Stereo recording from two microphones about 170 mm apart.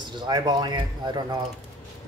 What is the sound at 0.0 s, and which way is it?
Speech, 25° right (ahead or behind).